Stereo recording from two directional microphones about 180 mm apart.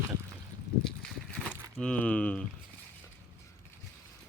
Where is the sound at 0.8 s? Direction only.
5° left (ahead or behind).